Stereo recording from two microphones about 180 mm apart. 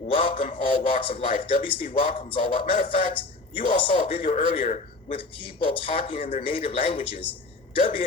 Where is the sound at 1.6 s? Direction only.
30° left (ahead or behind).